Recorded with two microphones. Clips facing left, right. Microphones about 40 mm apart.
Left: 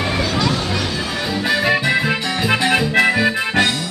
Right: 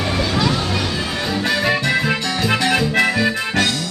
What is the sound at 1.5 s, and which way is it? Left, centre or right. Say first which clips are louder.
Music: left 2 dB; centre.